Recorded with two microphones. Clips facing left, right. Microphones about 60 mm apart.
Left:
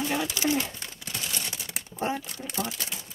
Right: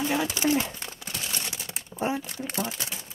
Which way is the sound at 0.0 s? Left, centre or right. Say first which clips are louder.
Right 2 dB; centre.